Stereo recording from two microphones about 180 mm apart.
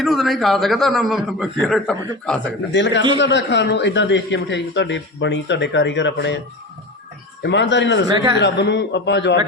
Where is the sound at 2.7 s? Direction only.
80° left.